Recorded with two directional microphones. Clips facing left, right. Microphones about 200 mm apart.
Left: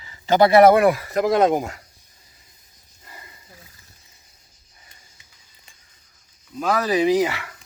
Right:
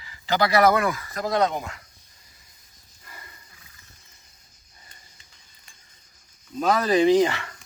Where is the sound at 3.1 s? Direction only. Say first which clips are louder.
Left 2 dB; 20° left (ahead or behind).